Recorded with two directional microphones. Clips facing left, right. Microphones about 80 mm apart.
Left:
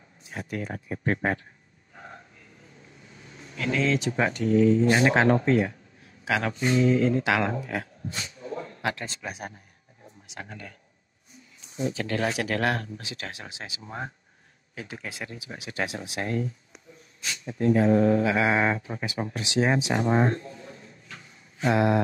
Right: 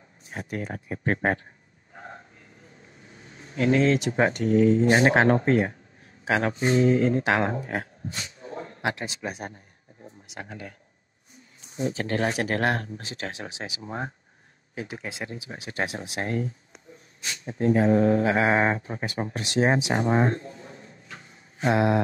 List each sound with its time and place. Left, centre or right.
0.3 s speech: right
3.4 s speech: right
8.6 s a sound: right
9.0 s speech: centre
11.7 s speech: right
19.3 s speech: right
19.9 s speech: right
21.1 s a sound: right